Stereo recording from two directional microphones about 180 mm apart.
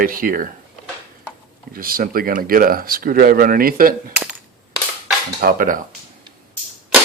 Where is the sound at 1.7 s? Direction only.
55° right (ahead or behind).